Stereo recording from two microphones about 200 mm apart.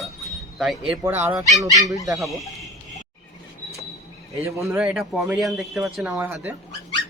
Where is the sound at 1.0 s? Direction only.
15° right (ahead or behind).